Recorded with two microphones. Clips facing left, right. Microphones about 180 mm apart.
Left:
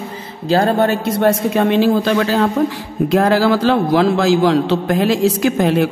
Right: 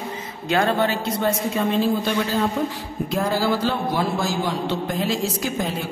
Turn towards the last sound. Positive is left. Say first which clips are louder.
# left 11 dB
turn(degrees=75)  # may be behind; listen again after turning